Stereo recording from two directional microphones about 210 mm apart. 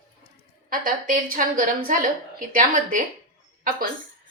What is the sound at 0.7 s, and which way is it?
A woman's voice, 40° right (ahead or behind).